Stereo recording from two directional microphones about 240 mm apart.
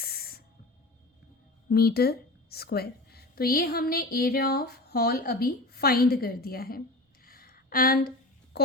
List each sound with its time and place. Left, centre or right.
0.0 s spray: left
1.7 s a woman's voice: left
7.3 s a sound: left
8.5 s a woman's voice: left